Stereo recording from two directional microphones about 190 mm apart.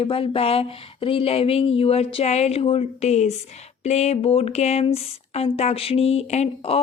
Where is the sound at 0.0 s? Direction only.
30° left (ahead or behind).